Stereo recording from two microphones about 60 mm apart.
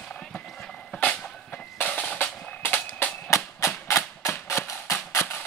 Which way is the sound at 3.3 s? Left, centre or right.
Left.